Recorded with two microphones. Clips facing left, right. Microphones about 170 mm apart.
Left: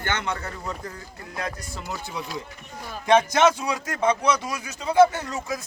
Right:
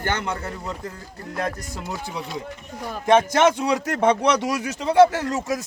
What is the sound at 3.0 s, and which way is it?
A man's voice, 50° right (ahead or behind).